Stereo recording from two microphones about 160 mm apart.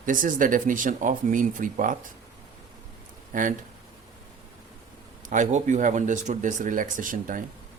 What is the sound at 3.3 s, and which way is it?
Speech, 60° right (ahead or behind).